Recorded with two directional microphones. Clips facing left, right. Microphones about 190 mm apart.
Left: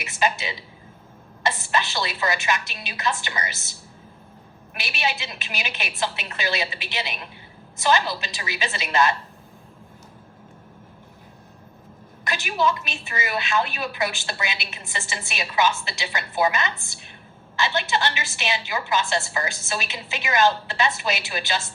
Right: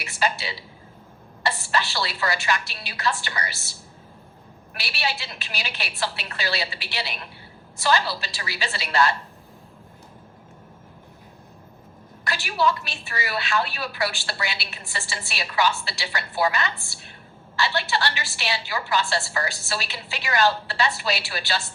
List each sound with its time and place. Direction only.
0.0 s a sound: 20° left (ahead or behind)
1.5 s a woman's voice: 20° left (ahead or behind)
12.2 s a woman's voice: 20° left (ahead or behind)